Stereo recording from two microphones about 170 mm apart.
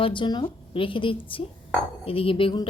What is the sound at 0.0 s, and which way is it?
A woman's voice, 30° left (ahead or behind).